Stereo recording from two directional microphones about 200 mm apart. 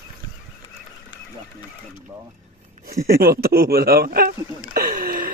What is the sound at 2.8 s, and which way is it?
Speech, 50° right (ahead or behind).